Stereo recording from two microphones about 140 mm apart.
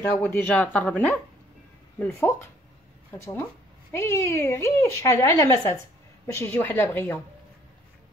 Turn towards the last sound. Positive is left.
turn(degrees=15)  # may be behind; listen again after turning